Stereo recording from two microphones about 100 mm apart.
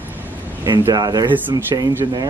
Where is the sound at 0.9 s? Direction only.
40° right (ahead or behind).